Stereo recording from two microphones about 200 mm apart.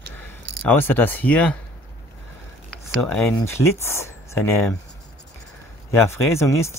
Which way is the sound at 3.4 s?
15° left (ahead or behind).